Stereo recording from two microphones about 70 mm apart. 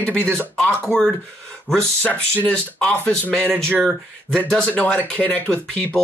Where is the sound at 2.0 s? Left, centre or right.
Left.